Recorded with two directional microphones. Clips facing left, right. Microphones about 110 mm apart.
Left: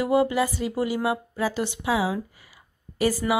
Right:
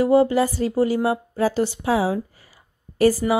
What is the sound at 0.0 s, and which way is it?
A woman's voice, 35° right (ahead or behind).